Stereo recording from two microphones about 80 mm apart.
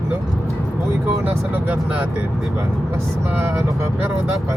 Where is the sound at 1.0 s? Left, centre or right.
Right.